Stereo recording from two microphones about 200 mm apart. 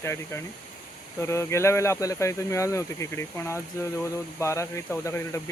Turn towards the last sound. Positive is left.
turn(degrees=10)  # may be behind; listen again after turning